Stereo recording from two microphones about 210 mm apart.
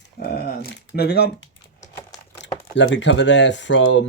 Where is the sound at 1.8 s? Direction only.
15° left (ahead or behind).